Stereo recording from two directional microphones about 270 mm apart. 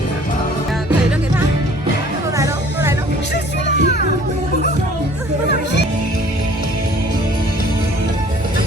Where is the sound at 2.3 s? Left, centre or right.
Centre.